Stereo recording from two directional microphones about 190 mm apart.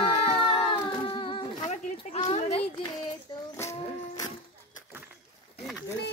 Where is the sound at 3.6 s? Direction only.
15° left (ahead or behind).